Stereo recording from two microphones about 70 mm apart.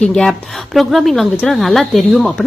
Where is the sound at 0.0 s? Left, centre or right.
Centre.